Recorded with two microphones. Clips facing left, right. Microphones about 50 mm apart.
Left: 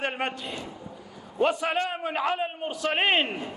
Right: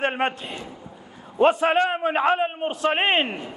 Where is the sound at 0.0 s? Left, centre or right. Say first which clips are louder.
Right 6 dB; right.